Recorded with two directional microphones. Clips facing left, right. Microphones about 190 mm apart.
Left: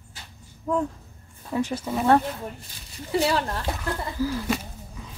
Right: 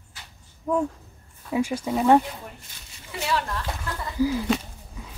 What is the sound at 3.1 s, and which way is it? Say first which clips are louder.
Speech: left 4 dB; 35° left (ahead or behind).